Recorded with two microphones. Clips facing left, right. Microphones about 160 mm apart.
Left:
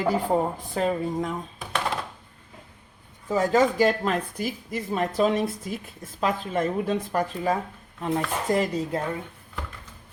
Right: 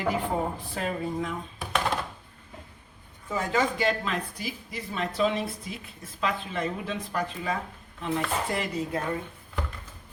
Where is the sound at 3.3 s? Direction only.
40° left (ahead or behind).